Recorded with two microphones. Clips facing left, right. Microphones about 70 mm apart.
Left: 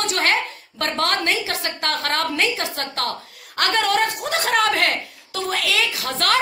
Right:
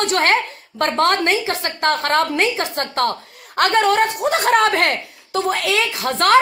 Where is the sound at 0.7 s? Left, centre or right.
Right.